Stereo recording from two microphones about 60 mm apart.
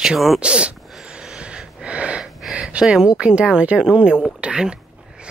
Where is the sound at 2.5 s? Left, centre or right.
Centre.